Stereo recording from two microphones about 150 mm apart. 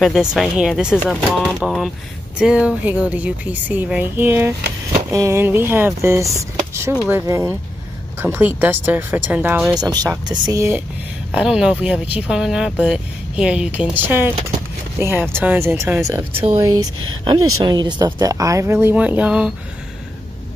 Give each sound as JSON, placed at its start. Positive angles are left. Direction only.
{"t": 0.0, "sound": "speech", "side_deg": -5}
{"t": 9.8, "sound": "speech", "side_deg": -25}
{"t": 11.3, "sound": "speech", "side_deg": -5}
{"t": 16.5, "sound": "speech", "side_deg": -25}